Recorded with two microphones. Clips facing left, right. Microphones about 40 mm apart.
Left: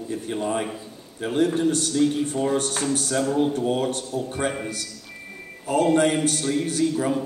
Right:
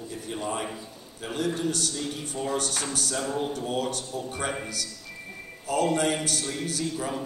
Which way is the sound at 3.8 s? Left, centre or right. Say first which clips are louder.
Left 5 dB; left.